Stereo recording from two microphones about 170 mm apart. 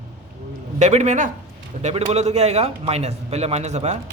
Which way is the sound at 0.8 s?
45° right (ahead or behind).